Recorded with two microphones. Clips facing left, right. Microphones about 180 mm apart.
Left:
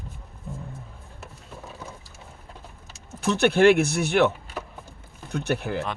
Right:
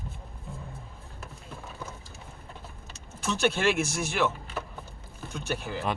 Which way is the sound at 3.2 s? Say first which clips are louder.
Left 8 dB; 60° left (ahead or behind).